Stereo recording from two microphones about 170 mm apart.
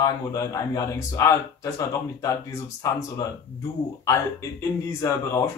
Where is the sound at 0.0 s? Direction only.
20° left (ahead or behind).